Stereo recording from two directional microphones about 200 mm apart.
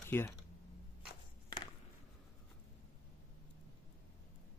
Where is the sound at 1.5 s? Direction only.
20° left (ahead or behind).